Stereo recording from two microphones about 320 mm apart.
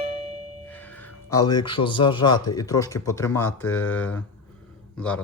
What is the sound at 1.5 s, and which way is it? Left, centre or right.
Speech, centre.